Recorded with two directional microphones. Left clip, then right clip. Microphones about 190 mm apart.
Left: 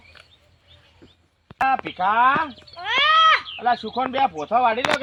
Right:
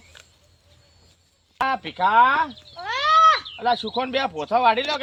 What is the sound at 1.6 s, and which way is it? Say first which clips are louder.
Speech: left 1 dB; 20° right (ahead or behind).